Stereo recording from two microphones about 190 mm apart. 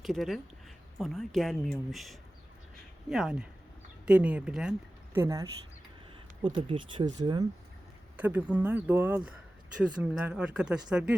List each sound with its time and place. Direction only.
0.0 s speech: centre (ahead or behind)
5.1 s speech: 15° right (ahead or behind)
8.1 s speech: 10° right (ahead or behind)